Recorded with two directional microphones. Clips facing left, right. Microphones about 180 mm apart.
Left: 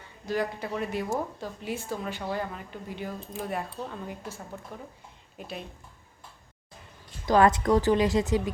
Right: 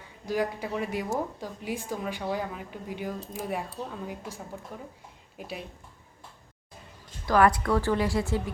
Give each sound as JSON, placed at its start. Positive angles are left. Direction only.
{"t": 0.3, "sound": "a woman's voice", "side_deg": -10}
{"t": 7.3, "sound": "a woman's voice", "side_deg": 25}